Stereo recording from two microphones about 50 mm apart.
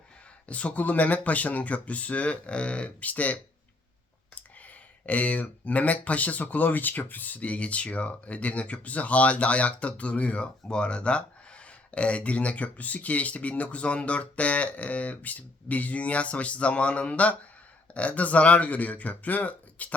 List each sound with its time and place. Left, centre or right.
0.4 s speech: left
5.0 s speech: left